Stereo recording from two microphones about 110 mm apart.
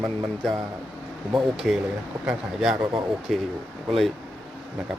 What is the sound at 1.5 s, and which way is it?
Speech, 5° right (ahead or behind).